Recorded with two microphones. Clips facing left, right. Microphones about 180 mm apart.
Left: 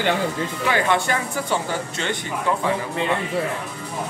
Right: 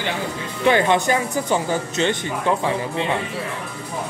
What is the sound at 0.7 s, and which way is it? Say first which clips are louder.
Speech: right 5 dB; 20° right (ahead or behind).